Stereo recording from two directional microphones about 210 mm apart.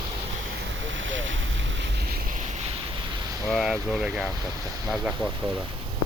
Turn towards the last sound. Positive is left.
turn(degrees=0)  # may be behind; listen again after turning